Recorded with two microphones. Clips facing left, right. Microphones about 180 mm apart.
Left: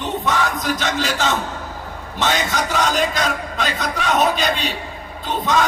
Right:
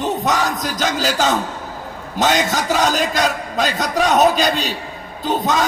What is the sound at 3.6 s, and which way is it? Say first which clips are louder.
A man's voice: right 8 dB; 40° right (ahead or behind).